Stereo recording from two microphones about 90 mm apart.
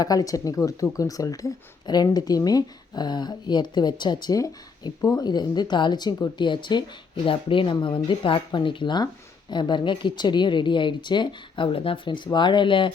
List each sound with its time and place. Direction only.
0.0 s speech: 45° left (ahead or behind)
7.3 s speech: 75° left (ahead or behind)